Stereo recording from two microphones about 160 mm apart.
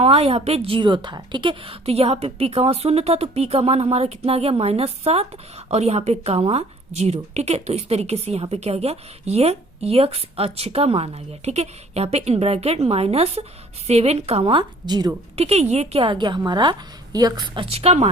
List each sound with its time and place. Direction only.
0.0 s a woman's voice: 40° right (ahead or behind)
15.4 s a woman's voice: 40° right (ahead or behind)